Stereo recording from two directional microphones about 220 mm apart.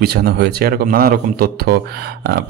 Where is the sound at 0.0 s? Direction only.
45° right (ahead or behind).